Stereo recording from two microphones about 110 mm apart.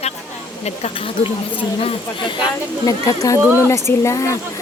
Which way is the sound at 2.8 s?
30° left (ahead or behind).